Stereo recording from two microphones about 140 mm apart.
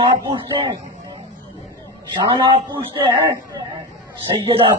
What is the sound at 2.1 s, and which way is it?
Speech, 35° right (ahead or behind).